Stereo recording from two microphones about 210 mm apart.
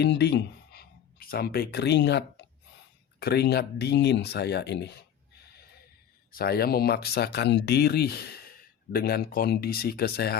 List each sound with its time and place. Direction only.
0.0 s speech: 50° left (ahead or behind)
6.3 s speech: 45° left (ahead or behind)